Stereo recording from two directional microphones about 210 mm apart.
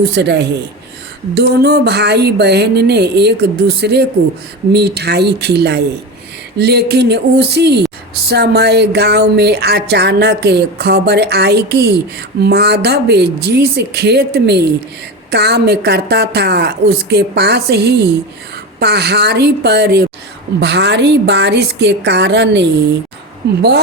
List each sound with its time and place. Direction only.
0.0 s a woman's voice: 55° right (ahead or behind)